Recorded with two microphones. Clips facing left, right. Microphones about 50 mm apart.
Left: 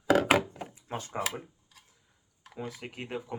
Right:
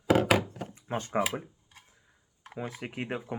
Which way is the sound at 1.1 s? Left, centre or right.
Centre.